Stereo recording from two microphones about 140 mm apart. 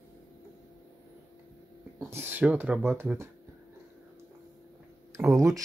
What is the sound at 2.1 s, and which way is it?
Speech, 15° right (ahead or behind).